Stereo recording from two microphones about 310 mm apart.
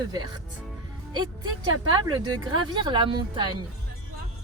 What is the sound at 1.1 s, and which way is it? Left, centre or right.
Speech, centre.